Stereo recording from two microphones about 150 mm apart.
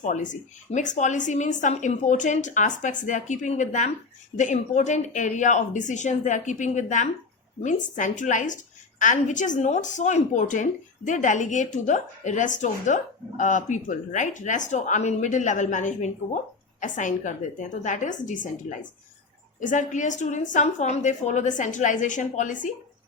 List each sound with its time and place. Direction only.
0.0 s a woman's voice: 55° left (ahead or behind)
19.5 s a woman's voice: 55° left (ahead or behind)